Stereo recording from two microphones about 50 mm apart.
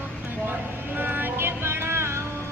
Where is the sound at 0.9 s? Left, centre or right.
Right.